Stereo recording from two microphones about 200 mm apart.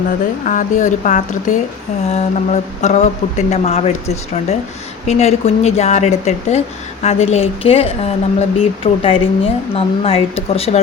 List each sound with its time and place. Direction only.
0.4 s speech: 40° left (ahead or behind)
5.0 s speech: 30° left (ahead or behind)